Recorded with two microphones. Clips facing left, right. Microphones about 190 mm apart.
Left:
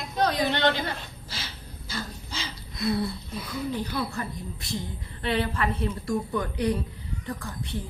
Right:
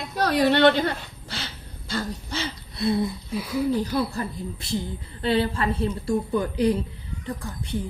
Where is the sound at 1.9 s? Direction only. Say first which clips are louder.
Right 7 dB; 65° right (ahead or behind).